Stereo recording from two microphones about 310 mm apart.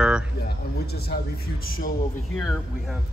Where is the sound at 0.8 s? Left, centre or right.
Left.